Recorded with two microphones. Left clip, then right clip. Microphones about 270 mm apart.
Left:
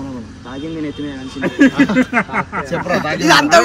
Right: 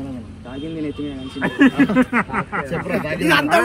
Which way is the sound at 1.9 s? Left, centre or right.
Centre.